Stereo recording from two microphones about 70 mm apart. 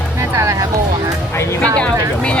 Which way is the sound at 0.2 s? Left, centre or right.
Right.